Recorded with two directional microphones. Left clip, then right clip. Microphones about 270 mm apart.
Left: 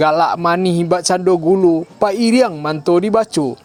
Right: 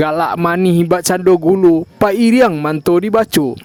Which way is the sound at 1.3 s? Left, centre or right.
Right.